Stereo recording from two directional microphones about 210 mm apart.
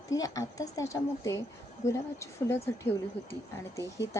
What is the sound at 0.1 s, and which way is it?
Speech, 15° left (ahead or behind).